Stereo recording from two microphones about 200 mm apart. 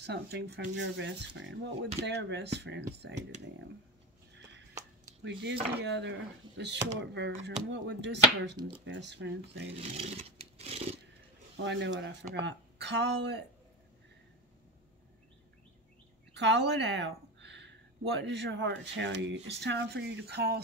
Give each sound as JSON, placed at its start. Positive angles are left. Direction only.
{"t": 0.0, "sound": "speech", "side_deg": -55}
{"t": 5.2, "sound": "speech", "side_deg": -60}
{"t": 8.5, "sound": "speech", "side_deg": -25}
{"t": 8.8, "sound": "speech", "side_deg": -60}
{"t": 9.8, "sound": "a sound", "side_deg": -30}
{"t": 11.5, "sound": "speech", "side_deg": -60}
{"t": 16.3, "sound": "speech", "side_deg": -60}